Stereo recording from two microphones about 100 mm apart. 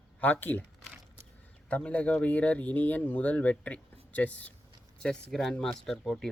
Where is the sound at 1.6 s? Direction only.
15° left (ahead or behind).